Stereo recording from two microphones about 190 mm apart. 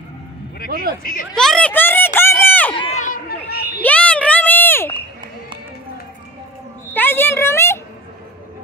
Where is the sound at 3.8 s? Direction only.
5° left (ahead or behind).